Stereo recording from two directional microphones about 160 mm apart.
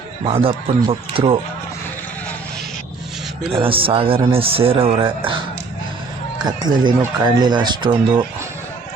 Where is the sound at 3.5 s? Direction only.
35° right (ahead or behind).